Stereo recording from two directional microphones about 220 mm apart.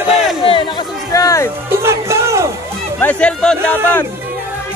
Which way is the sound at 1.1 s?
15° left (ahead or behind).